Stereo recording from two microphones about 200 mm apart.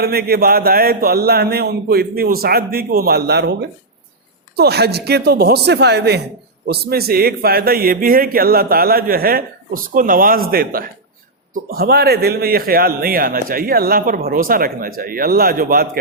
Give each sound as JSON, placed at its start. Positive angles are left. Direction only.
{"t": 0.0, "sound": "a man's voice", "side_deg": -50}